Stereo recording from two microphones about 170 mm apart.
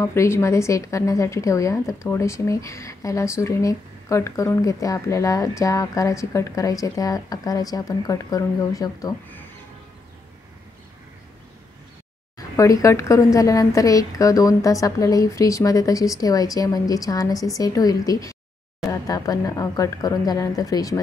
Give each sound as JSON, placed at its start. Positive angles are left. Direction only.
{"t": 0.0, "sound": "a woman's voice", "side_deg": 15}
{"t": 12.4, "sound": "a woman's voice", "side_deg": 20}